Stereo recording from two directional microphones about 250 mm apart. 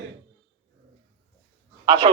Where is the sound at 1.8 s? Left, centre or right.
Right.